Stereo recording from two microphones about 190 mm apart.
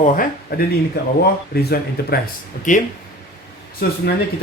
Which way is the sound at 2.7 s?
40° left (ahead or behind).